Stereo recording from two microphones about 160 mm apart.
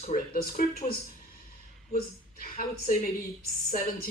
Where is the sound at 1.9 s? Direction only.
65° left (ahead or behind).